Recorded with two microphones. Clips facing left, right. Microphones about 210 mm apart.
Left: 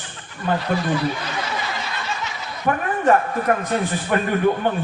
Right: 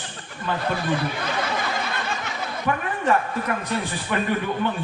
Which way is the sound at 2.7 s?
45° left (ahead or behind).